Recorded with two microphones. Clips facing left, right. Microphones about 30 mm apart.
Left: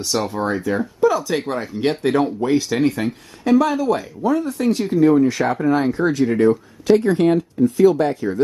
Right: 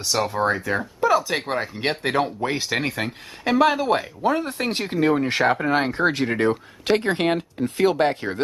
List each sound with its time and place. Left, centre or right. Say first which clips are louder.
0.0 s speech: even; centre; by 3.1 s right
3.4 s speech: left 2 dB; right